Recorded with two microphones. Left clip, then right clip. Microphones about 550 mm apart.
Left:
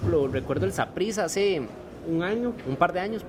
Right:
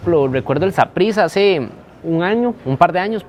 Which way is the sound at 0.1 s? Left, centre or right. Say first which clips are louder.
Right 10 dB; right.